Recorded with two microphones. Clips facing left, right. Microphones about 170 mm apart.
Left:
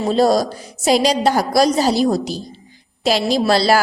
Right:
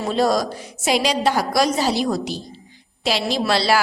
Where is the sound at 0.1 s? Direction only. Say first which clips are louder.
Left 4 dB; 35° left (ahead or behind).